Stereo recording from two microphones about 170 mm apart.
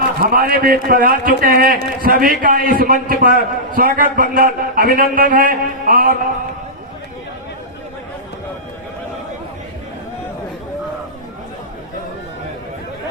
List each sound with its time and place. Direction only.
0.3 s a man's voice: 60° right (ahead or behind)